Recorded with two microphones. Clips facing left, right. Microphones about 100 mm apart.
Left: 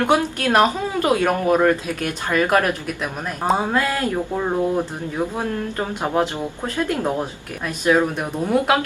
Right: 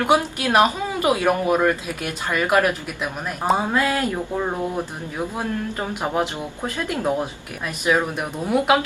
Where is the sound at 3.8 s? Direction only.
20° right (ahead or behind).